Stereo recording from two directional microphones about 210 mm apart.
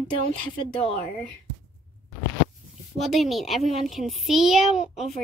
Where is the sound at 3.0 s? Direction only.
Centre (ahead or behind).